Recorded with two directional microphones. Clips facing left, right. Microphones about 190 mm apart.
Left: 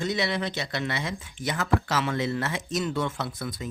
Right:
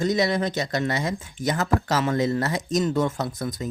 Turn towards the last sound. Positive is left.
turn(degrees=-40)  # may be behind; listen again after turning